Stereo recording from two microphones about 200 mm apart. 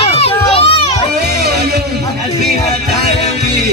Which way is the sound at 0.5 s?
30° left (ahead or behind).